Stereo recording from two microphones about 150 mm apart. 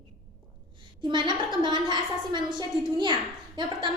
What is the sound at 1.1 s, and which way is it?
A woman's voice, 30° right (ahead or behind).